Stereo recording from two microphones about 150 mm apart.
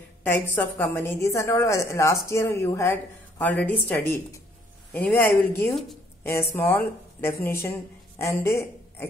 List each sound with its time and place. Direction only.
0.2 s a woman's voice: 15° left (ahead or behind)